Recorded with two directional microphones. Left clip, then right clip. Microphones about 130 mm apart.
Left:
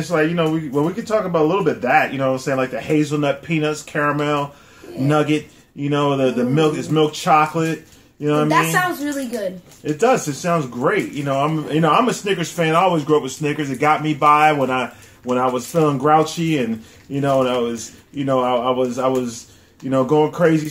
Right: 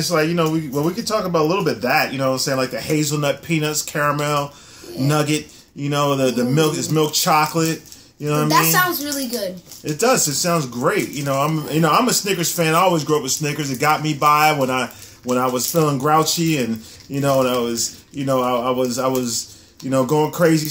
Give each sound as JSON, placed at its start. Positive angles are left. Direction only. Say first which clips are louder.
{"t": 0.1, "sound": "speech", "louder": "left 2 dB", "side_deg": 15}
{"t": 8.5, "sound": "a woman's voice", "louder": "right 4 dB", "side_deg": -5}
{"t": 9.8, "sound": "speech", "louder": "left 1 dB", "side_deg": 15}